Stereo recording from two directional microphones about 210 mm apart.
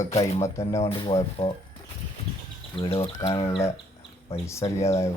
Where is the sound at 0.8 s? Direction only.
25° left (ahead or behind).